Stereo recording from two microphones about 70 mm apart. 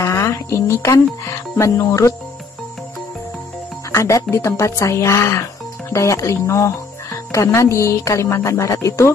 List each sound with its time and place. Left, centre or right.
0.0 s speech: left
3.9 s speech: left